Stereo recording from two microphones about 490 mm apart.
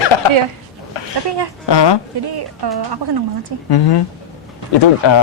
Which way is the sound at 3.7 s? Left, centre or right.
Left.